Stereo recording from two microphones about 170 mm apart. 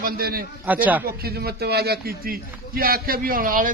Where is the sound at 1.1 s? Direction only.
65° right (ahead or behind).